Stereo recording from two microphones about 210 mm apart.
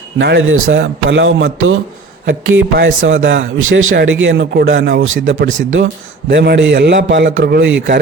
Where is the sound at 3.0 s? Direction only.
60° right (ahead or behind).